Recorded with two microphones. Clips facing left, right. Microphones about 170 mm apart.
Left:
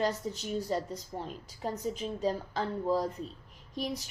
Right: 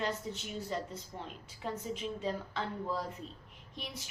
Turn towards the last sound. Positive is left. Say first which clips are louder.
# left 10 dB
turn(degrees=40)  # may be behind; listen again after turning